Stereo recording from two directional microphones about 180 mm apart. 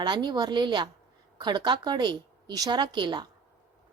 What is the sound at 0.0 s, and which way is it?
A woman's voice, 25° right (ahead or behind).